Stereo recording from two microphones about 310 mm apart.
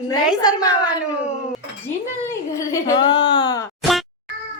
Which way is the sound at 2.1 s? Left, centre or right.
Centre.